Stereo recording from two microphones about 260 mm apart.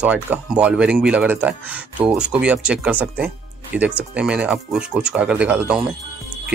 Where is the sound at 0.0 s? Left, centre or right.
Centre.